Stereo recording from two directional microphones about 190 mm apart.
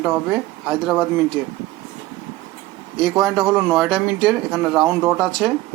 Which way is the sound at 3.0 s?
Centre (ahead or behind).